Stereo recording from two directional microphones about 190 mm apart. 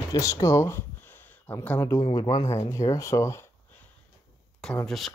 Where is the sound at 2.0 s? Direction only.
25° left (ahead or behind).